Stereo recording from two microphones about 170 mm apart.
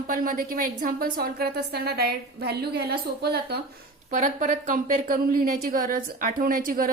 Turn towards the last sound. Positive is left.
turn(degrees=-55)  # may be behind; listen again after turning